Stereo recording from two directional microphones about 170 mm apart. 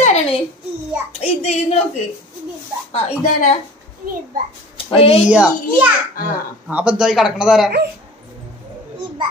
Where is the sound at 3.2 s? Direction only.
45° left (ahead or behind).